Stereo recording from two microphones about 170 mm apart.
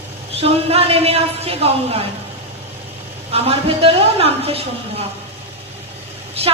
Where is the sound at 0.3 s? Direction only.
35° right (ahead or behind).